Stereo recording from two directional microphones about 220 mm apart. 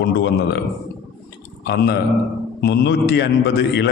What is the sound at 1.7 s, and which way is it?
Speech, 50° left (ahead or behind).